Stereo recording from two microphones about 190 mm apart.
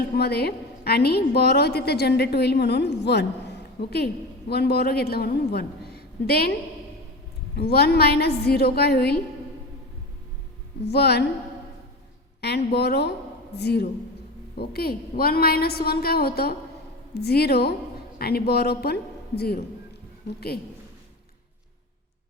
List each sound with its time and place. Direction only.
0.2 s a woman's voice: 55° left (ahead or behind)
7.5 s a woman's voice: 60° left (ahead or behind)
10.8 s a woman's voice: 60° left (ahead or behind)
12.4 s a woman's voice: 60° left (ahead or behind)